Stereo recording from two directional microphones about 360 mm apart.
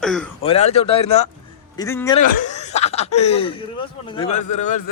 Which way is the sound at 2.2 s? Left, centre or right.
Centre.